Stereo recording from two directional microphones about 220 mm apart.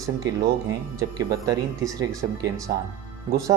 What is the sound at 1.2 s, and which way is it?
Speech, 15° right (ahead or behind).